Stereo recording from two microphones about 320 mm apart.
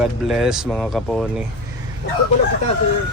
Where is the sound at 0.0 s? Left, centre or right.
Centre.